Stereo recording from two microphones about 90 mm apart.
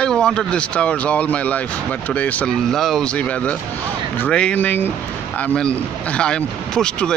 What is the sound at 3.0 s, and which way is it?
A man's voice, 15° left (ahead or behind).